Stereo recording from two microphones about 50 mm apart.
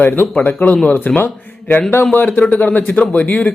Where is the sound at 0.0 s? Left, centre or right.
Left.